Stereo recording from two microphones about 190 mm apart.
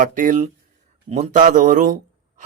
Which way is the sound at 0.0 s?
45° right (ahead or behind).